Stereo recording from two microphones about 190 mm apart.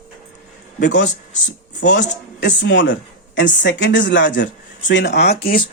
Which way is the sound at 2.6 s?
75° left (ahead or behind).